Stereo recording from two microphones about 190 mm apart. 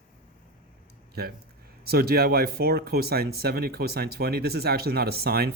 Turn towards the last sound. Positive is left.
turn(degrees=-55)  # may be behind; listen again after turning